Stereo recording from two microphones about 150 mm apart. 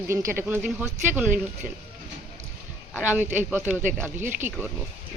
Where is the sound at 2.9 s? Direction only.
10° right (ahead or behind).